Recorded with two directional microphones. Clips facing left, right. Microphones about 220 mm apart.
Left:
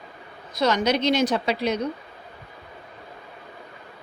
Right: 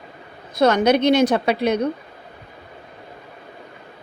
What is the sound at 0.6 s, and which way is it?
A woman's voice, 55° right (ahead or behind).